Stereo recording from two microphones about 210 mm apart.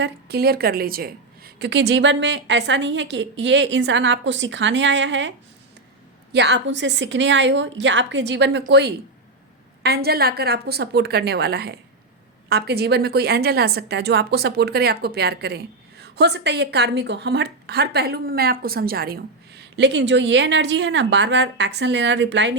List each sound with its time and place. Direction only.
0.0 s a woman's voice: 50° right (ahead or behind)
6.3 s a woman's voice: 55° right (ahead or behind)